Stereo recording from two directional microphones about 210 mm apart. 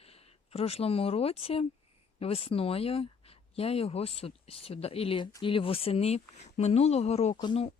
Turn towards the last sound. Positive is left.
turn(degrees=25)  # may be behind; listen again after turning